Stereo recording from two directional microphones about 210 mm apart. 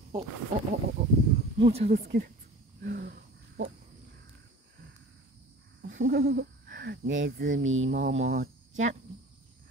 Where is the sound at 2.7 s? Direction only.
45° right (ahead or behind).